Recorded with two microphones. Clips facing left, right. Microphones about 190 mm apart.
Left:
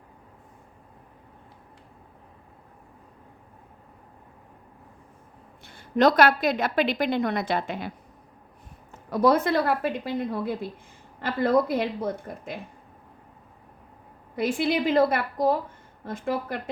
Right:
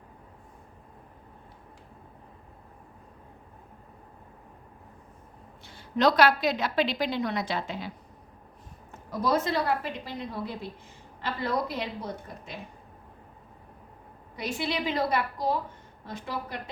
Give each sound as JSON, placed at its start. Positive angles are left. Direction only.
{"t": 5.6, "sound": "a woman's voice", "side_deg": 50}
{"t": 9.0, "sound": "a woman's voice", "side_deg": 60}
{"t": 14.3, "sound": "a woman's voice", "side_deg": 55}